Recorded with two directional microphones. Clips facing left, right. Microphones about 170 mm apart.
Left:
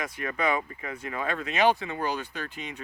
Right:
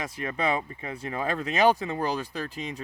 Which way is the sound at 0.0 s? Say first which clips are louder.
Even; 30° right (ahead or behind).